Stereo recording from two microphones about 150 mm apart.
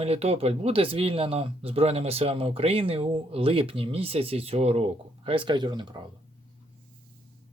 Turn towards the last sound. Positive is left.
turn(degrees=-30)  # may be behind; listen again after turning